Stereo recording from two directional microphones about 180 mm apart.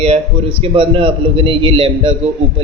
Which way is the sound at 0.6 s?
30° right (ahead or behind).